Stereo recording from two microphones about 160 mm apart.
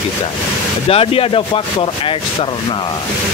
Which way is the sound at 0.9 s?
35° left (ahead or behind).